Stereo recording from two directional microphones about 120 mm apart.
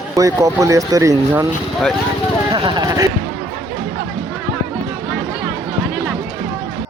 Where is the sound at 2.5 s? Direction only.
40° right (ahead or behind).